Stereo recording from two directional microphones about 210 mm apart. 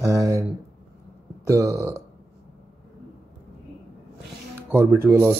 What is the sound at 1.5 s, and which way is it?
Speech, 15° right (ahead or behind).